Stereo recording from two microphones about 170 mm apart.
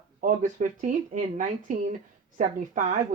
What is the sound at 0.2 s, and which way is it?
Speech, 50° right (ahead or behind).